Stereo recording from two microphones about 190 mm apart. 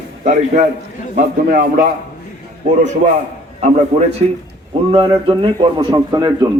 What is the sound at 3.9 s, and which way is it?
A man's voice, 30° right (ahead or behind).